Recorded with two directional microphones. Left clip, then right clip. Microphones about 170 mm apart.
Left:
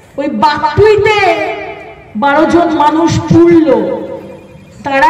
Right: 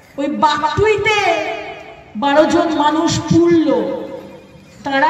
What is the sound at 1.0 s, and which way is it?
A woman's voice, 20° left (ahead or behind).